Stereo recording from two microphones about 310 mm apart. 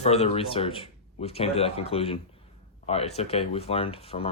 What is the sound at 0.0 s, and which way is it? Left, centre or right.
Speech, centre.